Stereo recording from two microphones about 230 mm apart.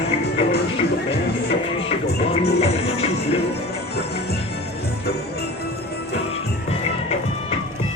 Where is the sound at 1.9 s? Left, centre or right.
Left.